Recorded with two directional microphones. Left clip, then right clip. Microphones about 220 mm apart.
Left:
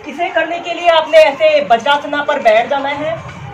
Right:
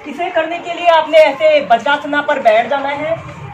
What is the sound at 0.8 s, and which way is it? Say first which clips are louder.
A woman's voice: even; 5° left (ahead or behind).